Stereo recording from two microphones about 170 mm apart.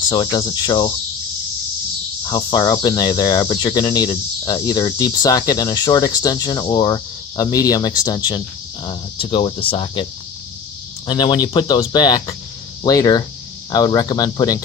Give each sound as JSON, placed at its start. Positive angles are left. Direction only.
{"t": 0.1, "sound": "speech", "side_deg": 25}
{"t": 2.2, "sound": "speech", "side_deg": 25}